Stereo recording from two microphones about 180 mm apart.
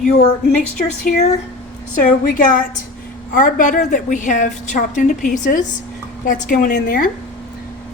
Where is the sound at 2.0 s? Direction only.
50° left (ahead or behind).